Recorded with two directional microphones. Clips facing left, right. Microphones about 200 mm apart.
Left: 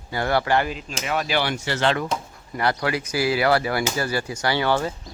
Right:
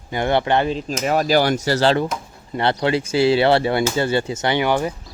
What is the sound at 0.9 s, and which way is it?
Speech, 40° right (ahead or behind).